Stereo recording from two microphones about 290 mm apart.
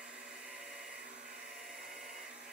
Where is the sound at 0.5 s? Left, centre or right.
Centre.